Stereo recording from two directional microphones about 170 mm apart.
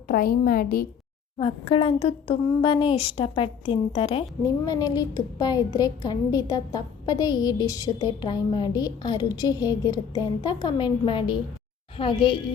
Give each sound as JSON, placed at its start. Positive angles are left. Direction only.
{"t": 0.1, "sound": "a woman's voice", "side_deg": 60}
{"t": 1.4, "sound": "a woman's voice", "side_deg": 30}